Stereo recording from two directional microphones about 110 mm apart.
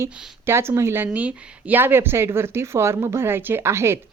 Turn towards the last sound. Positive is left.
turn(degrees=-25)  # may be behind; listen again after turning